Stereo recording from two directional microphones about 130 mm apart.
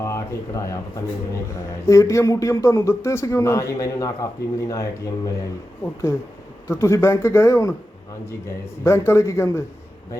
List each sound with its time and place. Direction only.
0.0 s speech: 25° left (ahead or behind)
1.9 s a man's voice: 25° left (ahead or behind)
6.7 s a man's voice: 20° left (ahead or behind)